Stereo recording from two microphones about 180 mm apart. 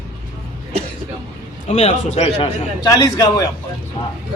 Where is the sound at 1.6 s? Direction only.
35° left (ahead or behind).